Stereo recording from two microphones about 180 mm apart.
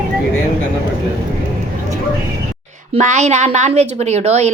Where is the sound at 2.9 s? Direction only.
40° right (ahead or behind).